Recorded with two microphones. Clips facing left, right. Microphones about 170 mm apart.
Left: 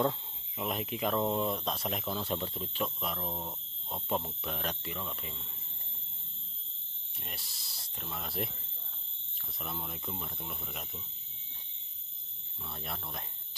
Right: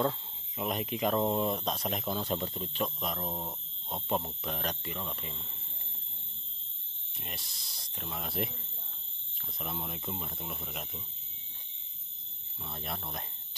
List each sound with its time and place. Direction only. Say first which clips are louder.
0.6 s speech: right 2 dB; centre (ahead or behind)
3.2 s speech: right 1 dB; 15° right (ahead or behind)
4.4 s speech: right 1 dB; centre (ahead or behind)
7.2 s speech: right 2 dB; centre (ahead or behind)
9.8 s speech: right 2 dB; centre (ahead or behind)
12.6 s speech: right 2 dB; 10° right (ahead or behind)